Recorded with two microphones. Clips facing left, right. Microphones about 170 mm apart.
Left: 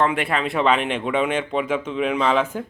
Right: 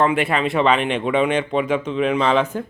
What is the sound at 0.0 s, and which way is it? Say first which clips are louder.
Speech: right 3 dB; centre (ahead or behind).